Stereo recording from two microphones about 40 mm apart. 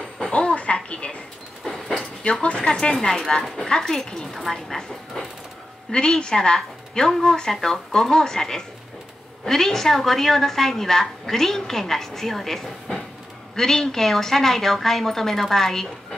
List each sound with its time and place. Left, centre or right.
0.6 s music: left
1.6 s vehicle: centre
2.3 s speech: left
2.6 s a woman's voice: centre
5.9 s a woman's voice: centre